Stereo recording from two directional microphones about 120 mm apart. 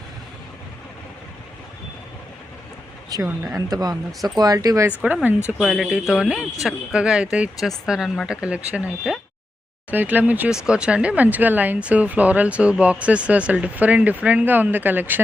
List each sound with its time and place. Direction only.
3.1 s speech: 30° right (ahead or behind)
4.9 s speech: 10° right (ahead or behind)
5.5 s speech: centre (ahead or behind)